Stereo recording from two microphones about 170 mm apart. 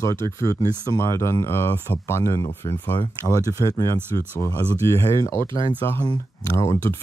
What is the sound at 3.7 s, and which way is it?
Speech, 20° left (ahead or behind).